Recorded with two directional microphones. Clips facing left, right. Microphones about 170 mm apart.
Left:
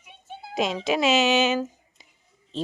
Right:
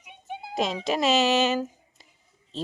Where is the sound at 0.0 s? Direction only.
15° right (ahead or behind).